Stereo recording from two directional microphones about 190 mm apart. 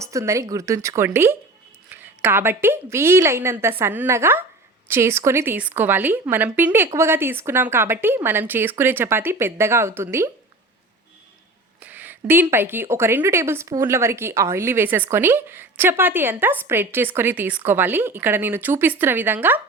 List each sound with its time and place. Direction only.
0.0 s speech: 15° right (ahead or behind)
11.8 s speech: 10° right (ahead or behind)